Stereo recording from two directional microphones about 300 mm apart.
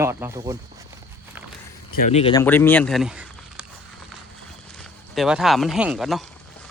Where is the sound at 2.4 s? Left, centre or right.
Centre.